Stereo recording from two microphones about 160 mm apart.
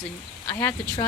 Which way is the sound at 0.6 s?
20° left (ahead or behind).